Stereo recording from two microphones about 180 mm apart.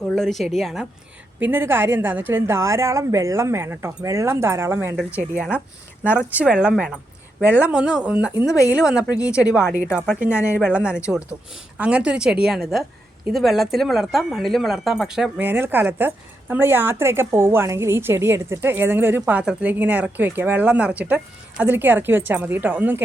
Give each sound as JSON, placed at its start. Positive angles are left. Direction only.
{"t": 0.1, "sound": "a woman's voice", "side_deg": 0}